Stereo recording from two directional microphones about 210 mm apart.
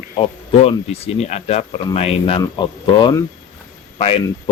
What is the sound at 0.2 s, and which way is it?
Speech, 25° left (ahead or behind).